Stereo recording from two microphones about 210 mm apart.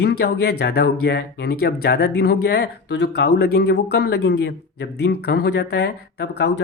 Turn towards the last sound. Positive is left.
turn(degrees=50)  # may be behind; listen again after turning